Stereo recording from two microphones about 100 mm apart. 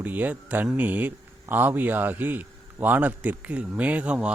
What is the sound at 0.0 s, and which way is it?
A man's voice, 15° right (ahead or behind).